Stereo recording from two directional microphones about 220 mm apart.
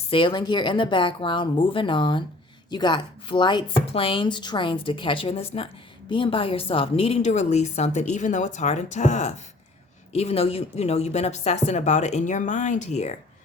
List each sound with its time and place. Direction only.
0.1 s a woman's voice: 25° left (ahead or behind)